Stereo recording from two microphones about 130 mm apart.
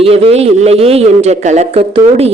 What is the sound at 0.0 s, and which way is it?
A man's voice, 50° right (ahead or behind).